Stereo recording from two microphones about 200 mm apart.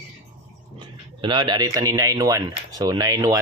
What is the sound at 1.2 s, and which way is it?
Speech, 25° right (ahead or behind).